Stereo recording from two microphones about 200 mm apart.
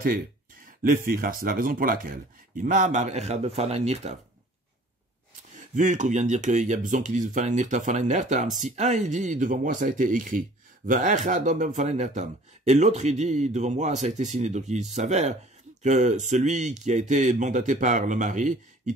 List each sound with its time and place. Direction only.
0.7 s speech: 45° right (ahead or behind)
5.8 s speech: 40° right (ahead or behind)